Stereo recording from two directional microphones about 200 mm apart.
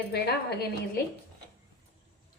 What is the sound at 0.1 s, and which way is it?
Speech, 55° left (ahead or behind).